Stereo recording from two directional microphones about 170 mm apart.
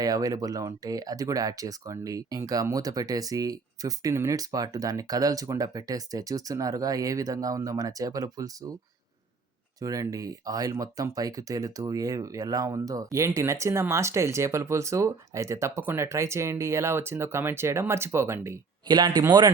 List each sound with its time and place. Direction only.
0.0 s speech: 20° right (ahead or behind)
9.8 s speech: 20° right (ahead or behind)